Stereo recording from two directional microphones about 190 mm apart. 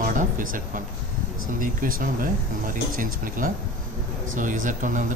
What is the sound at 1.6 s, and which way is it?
A man's voice, 45° right (ahead or behind).